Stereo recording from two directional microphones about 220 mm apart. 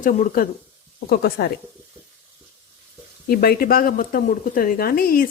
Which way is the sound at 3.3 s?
45° left (ahead or behind).